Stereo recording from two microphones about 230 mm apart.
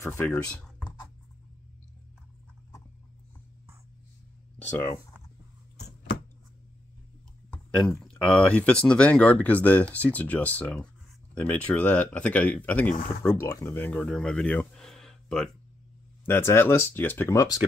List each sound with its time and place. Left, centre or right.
0.0 s speech: centre
5.8 s a sound: left
7.5 s speech: centre